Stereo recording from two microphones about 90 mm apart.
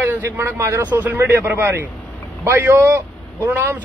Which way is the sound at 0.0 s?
25° right (ahead or behind).